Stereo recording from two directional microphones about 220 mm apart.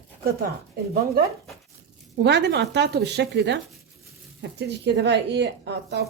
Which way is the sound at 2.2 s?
50° right (ahead or behind).